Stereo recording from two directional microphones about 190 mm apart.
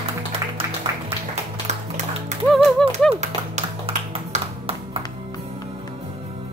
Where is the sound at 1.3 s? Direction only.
35° right (ahead or behind).